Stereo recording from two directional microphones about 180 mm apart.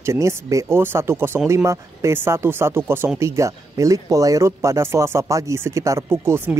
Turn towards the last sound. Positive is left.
turn(degrees=-10)  # may be behind; listen again after turning